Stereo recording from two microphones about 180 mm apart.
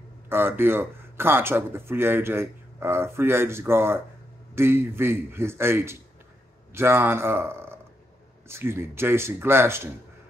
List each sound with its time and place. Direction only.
0.3 s a man's voice: 10° right (ahead or behind)